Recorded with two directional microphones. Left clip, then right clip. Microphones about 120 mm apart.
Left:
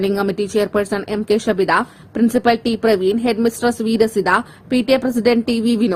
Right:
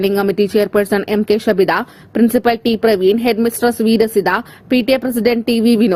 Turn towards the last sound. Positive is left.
turn(degrees=-30)  # may be behind; listen again after turning